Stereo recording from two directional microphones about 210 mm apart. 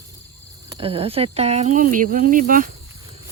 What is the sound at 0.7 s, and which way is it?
Speech, 25° right (ahead or behind).